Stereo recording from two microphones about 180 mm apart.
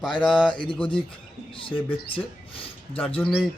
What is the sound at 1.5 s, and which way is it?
Speech, 30° left (ahead or behind).